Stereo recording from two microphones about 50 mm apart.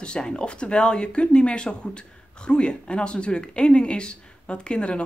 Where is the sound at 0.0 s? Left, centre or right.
Centre.